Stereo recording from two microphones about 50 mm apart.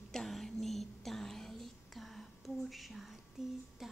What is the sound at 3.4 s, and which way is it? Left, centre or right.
Speech, centre.